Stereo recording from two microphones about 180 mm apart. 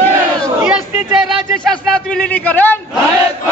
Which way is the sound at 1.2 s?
5° left (ahead or behind).